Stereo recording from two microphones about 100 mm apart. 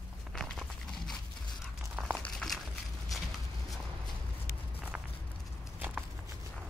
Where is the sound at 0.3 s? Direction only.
5° left (ahead or behind).